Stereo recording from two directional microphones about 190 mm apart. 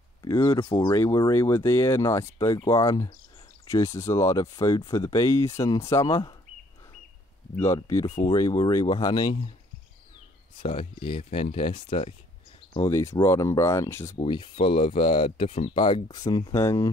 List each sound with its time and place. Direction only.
0.2 s speech: 15° left (ahead or behind)
7.6 s speech: 15° left (ahead or behind)
10.6 s speech: 25° left (ahead or behind)
12.7 s speech: 15° left (ahead or behind)
14.1 s speech: 25° left (ahead or behind)